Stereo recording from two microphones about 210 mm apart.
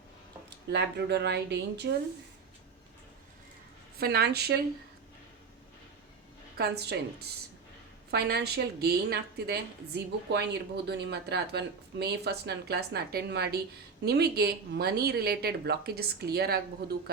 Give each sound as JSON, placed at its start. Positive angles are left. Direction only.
{"t": 0.7, "sound": "speech", "side_deg": -55}
{"t": 3.9, "sound": "speech", "side_deg": -45}
{"t": 6.6, "sound": "speech", "side_deg": -50}